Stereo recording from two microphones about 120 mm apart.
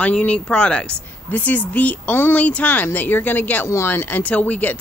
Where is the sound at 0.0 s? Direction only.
10° left (ahead or behind).